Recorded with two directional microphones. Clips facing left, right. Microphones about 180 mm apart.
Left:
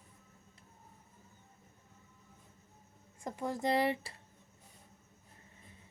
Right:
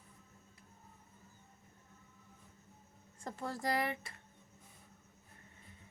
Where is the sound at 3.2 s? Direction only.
15° left (ahead or behind).